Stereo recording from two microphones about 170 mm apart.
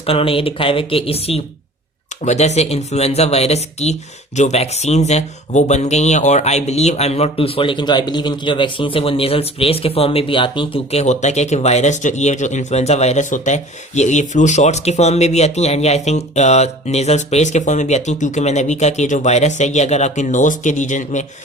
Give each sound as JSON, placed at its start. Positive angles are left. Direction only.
{"t": 0.0, "sound": "speech", "side_deg": 35}